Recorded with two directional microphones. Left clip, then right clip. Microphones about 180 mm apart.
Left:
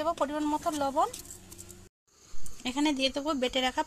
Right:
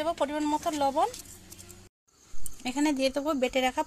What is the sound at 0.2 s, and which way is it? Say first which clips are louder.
Speech: right 1 dB; 15° right (ahead or behind).